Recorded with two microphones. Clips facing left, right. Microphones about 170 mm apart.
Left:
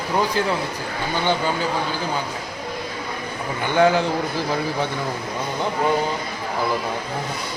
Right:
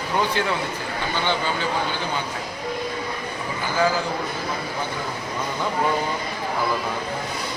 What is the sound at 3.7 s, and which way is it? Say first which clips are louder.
Speech: left 5 dB; 65° left (ahead or behind).